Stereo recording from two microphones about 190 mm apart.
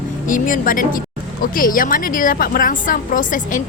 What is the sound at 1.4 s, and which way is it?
A woman's voice, 45° left (ahead or behind).